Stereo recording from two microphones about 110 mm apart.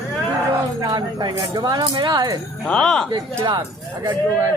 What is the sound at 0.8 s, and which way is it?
Speech, 35° right (ahead or behind).